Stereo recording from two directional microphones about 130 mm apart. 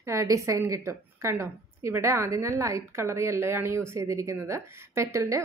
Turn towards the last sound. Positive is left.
turn(degrees=-20)  # may be behind; listen again after turning